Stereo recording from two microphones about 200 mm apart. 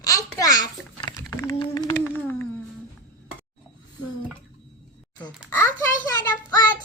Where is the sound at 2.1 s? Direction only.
10° left (ahead or behind).